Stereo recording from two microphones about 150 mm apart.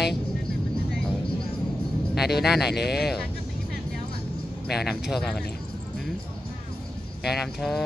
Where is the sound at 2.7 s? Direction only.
90° left.